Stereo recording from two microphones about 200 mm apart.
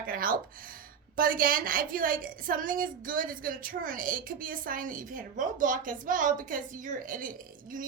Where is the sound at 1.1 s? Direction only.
45° right (ahead or behind).